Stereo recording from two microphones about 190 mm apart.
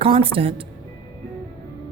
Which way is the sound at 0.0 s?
30° right (ahead or behind).